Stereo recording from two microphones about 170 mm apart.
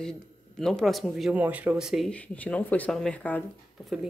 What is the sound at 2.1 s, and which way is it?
Speech, 5° left (ahead or behind).